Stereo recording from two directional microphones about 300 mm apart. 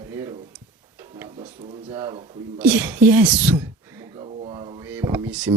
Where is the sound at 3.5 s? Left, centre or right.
Centre.